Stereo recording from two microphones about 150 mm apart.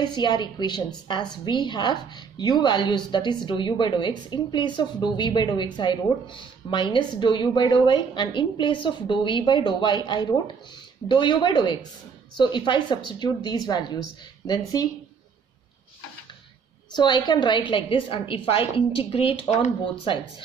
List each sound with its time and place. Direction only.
0.0 s a woman's voice: 30° left (ahead or behind)
16.9 s a woman's voice: 30° left (ahead or behind)